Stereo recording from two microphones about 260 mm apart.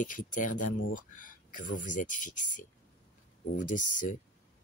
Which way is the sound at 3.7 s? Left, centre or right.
Left.